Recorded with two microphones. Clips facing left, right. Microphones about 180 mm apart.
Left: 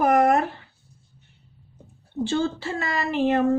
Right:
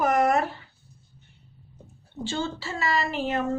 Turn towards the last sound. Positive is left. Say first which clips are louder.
# left 6 dB
turn(degrees=55)  # may be behind; listen again after turning